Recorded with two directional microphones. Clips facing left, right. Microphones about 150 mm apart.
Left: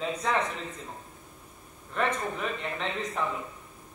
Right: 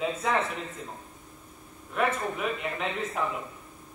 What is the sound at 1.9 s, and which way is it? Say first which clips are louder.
Speech: right 1 dB; 5° right (ahead or behind).